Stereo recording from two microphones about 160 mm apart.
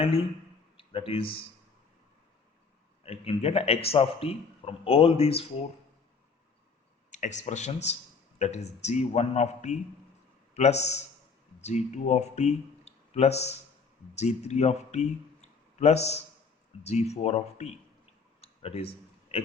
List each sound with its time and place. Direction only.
0.0 s a man's voice: 35° left (ahead or behind)
3.0 s a man's voice: 40° left (ahead or behind)
7.1 s a man's voice: 45° left (ahead or behind)
18.3 s a sound: 40° left (ahead or behind)